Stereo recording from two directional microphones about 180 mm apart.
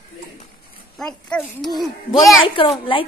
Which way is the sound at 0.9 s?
Centre (ahead or behind).